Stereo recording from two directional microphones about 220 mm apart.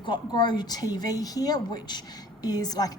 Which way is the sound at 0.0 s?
20° left (ahead or behind).